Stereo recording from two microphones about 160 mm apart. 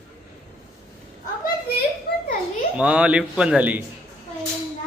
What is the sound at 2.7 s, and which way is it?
A man's voice, 5° right (ahead or behind).